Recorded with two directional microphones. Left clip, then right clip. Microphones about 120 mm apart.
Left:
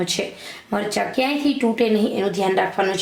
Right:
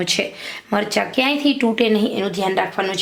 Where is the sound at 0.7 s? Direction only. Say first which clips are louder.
Right 3 dB; 30° right (ahead or behind).